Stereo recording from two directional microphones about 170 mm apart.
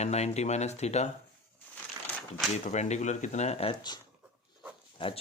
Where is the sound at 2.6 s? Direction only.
45° left (ahead or behind).